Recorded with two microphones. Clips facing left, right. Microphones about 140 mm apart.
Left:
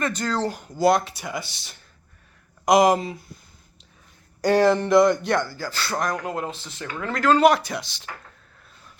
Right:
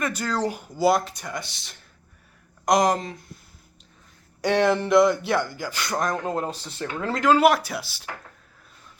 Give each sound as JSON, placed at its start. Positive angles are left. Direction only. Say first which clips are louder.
{"t": 0.0, "sound": "speech", "louder": "left 1 dB", "side_deg": -10}
{"t": 4.4, "sound": "speech", "louder": "left 3 dB", "side_deg": 0}
{"t": 7.2, "sound": "speech", "louder": "left 1 dB", "side_deg": -10}